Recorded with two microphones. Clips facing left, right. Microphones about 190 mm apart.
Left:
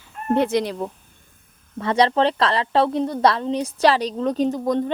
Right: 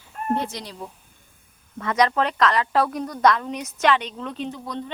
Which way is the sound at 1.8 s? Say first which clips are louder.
Left 3 dB; 30° left (ahead or behind).